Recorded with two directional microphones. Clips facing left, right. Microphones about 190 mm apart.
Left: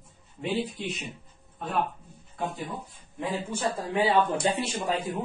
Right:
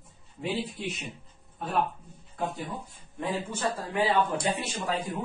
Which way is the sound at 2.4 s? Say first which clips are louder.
Even; centre (ahead or behind).